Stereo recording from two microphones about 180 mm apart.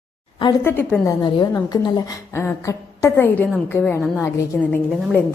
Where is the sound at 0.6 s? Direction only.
10° left (ahead or behind).